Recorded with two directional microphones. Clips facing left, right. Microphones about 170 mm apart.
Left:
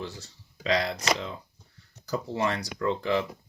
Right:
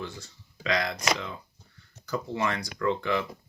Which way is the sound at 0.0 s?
35° left (ahead or behind).